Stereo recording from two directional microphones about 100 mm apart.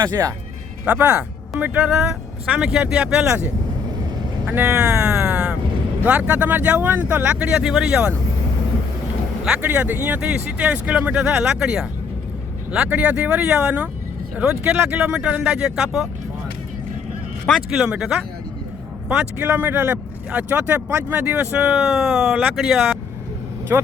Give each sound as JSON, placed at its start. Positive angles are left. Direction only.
{"t": 0.2, "sound": "speech", "side_deg": -30}
{"t": 0.9, "sound": "speech", "side_deg": -15}
{"t": 3.2, "sound": "speech", "side_deg": -20}
{"t": 9.4, "sound": "speech", "side_deg": -10}
{"t": 17.5, "sound": "speech", "side_deg": -5}
{"t": 23.7, "sound": "speech", "side_deg": -20}